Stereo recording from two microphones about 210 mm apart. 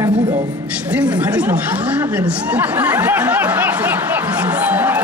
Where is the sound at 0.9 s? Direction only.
5° right (ahead or behind).